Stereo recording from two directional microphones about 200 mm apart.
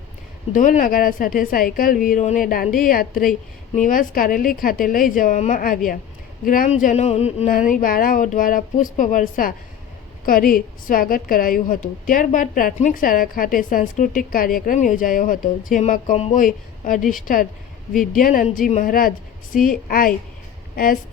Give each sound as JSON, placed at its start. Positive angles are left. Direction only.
{"t": 0.5, "sound": "a woman's voice", "side_deg": 40}